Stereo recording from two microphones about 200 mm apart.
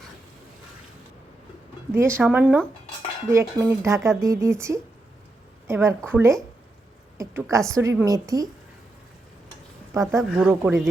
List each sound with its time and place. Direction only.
1.9 s a woman's voice: 10° right (ahead or behind)
10.2 s speech: 5° right (ahead or behind)
10.5 s speech: 15° right (ahead or behind)